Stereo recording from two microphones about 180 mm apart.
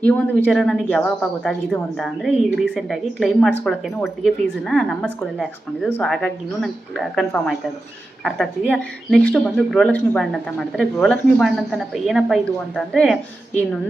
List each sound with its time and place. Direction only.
0.0 s speech: 5° left (ahead or behind)